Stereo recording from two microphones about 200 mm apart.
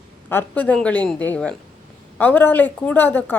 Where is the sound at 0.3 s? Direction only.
10° left (ahead or behind).